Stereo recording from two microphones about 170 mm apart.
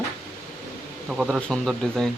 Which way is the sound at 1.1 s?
Centre (ahead or behind).